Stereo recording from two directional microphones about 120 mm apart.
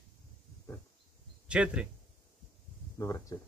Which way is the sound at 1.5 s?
10° right (ahead or behind).